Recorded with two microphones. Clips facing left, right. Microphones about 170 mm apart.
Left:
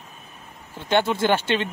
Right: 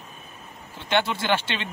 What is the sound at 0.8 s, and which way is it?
Speech, 50° left (ahead or behind).